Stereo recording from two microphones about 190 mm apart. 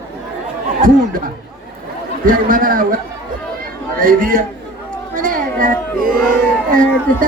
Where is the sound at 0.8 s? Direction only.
45° right (ahead or behind).